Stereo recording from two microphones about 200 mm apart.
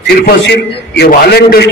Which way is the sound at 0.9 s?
55° left (ahead or behind).